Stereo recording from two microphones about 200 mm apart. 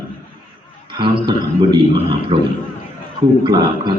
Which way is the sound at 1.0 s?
25° right (ahead or behind).